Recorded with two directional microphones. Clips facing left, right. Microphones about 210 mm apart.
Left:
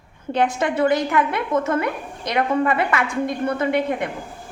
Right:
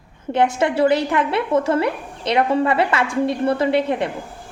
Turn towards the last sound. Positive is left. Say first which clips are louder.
# right 2 dB
turn(degrees=-30)  # may be behind; listen again after turning